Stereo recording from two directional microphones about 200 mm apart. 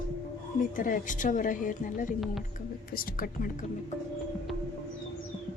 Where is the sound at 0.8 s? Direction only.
40° left (ahead or behind).